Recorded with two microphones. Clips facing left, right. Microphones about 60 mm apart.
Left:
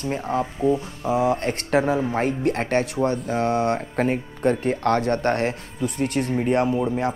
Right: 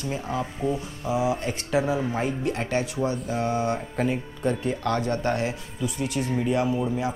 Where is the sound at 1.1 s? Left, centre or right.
Left.